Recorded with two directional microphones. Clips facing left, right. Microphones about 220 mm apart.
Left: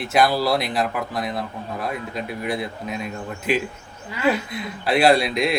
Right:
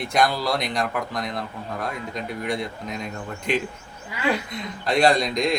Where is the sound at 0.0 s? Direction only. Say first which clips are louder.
Left 3 dB; 5° left (ahead or behind).